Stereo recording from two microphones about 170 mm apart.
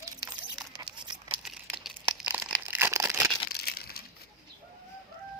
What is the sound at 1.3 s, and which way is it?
Crumpling, 5° right (ahead or behind).